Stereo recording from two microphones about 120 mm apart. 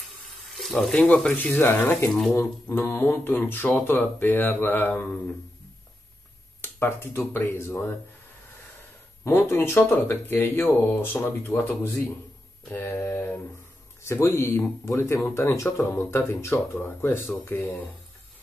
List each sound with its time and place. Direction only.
0.5 s water: centre (ahead or behind)
0.9 s speech: 10° left (ahead or behind)
6.6 s speech: 20° left (ahead or behind)
9.2 s speech: 20° left (ahead or behind)